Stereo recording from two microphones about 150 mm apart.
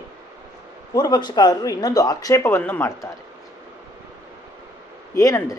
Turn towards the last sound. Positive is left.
turn(degrees=20)  # may be behind; listen again after turning